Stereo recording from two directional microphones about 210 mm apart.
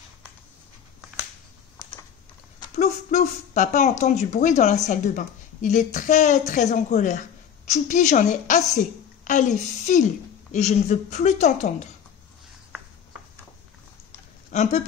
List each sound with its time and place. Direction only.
2.6 s a woman's voice: 30° left (ahead or behind)
14.5 s speech: 30° left (ahead or behind)